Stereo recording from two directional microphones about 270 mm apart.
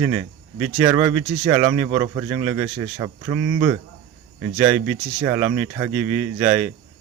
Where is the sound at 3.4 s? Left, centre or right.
Right.